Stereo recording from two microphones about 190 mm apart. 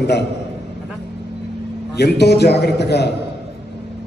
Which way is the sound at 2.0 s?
60° left (ahead or behind).